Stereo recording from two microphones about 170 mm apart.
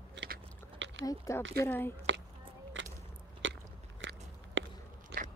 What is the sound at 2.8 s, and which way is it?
Biting, 90° right.